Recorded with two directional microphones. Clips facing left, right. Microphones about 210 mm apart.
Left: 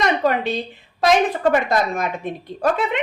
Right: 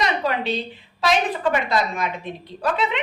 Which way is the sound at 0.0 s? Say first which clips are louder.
Left 4 dB; 45° left (ahead or behind).